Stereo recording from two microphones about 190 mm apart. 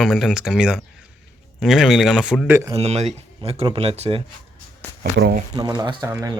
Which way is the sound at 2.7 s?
35° right (ahead or behind).